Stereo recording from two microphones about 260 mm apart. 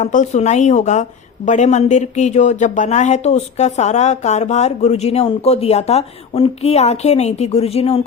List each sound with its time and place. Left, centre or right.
0.0 s speech: left